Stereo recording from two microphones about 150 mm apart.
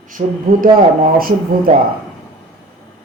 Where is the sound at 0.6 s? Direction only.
70° right (ahead or behind).